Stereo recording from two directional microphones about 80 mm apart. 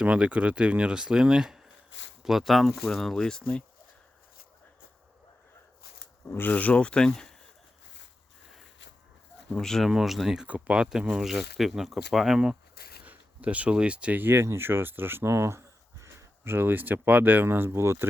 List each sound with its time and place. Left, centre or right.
0.0 s speech: centre
6.2 s speech: left; by 7.3 s centre
9.5 s speech: centre
10.4 s speech: centre; by 18.1 s right